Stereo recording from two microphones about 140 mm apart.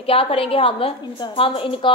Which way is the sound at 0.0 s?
40° left (ahead or behind).